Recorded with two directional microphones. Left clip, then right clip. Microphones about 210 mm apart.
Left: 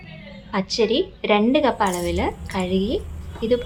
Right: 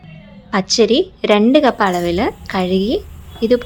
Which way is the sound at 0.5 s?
30° right (ahead or behind).